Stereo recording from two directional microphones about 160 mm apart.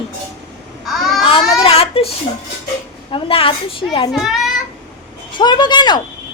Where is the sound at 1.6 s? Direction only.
35° left (ahead or behind).